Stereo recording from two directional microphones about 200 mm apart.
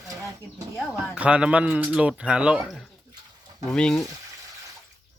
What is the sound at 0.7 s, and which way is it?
Speech, 5° right (ahead or behind).